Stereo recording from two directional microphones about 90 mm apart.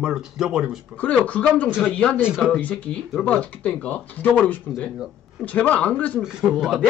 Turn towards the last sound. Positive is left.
turn(degrees=-5)  # may be behind; listen again after turning